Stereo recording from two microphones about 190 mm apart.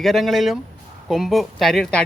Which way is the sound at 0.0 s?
Centre (ahead or behind).